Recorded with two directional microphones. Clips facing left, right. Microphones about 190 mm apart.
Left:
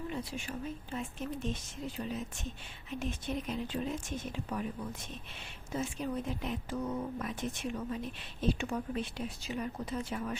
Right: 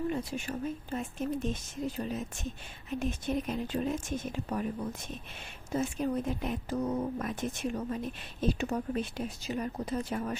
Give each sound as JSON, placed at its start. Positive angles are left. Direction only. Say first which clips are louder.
{"t": 0.1, "sound": "speech", "louder": "right 5 dB", "side_deg": -45}
{"t": 5.7, "sound": "speech", "louder": "right 5 dB", "side_deg": -45}